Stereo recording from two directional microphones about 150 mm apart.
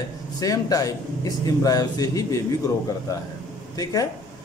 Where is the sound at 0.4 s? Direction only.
25° left (ahead or behind).